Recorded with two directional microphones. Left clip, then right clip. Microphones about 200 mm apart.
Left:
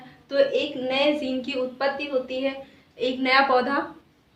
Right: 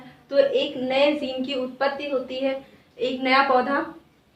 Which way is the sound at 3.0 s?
30° left (ahead or behind).